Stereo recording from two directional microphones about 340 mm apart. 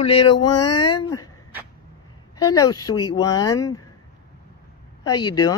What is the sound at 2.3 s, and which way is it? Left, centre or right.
Speech, centre.